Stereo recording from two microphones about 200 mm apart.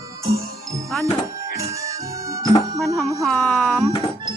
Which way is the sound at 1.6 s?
15° right (ahead or behind).